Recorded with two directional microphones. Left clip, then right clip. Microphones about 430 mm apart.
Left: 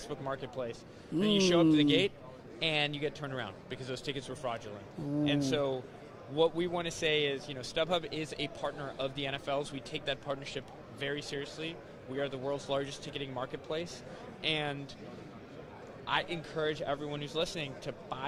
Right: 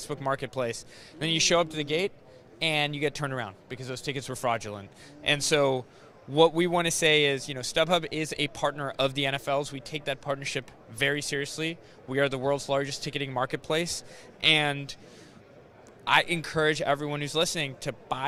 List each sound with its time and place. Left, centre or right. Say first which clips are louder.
0.0 s speech: right 8 dB; right
16.0 s speech: right 10 dB; right